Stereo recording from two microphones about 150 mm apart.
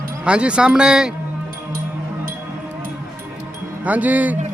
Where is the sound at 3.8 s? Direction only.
10° right (ahead or behind).